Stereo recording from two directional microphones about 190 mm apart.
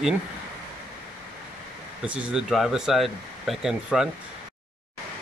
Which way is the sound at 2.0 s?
5° right (ahead or behind).